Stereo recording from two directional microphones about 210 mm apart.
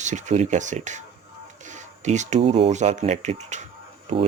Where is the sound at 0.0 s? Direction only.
35° right (ahead or behind).